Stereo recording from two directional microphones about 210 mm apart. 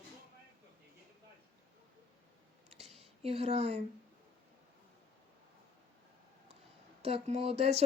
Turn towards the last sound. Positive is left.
turn(degrees=-30)  # may be behind; listen again after turning